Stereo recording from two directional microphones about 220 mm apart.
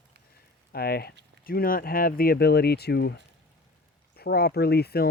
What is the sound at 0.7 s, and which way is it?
Speech, 45° left (ahead or behind).